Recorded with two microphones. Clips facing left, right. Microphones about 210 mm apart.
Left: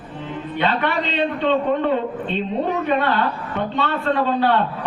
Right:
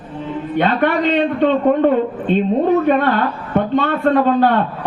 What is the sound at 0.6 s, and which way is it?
A man's voice, 50° right (ahead or behind).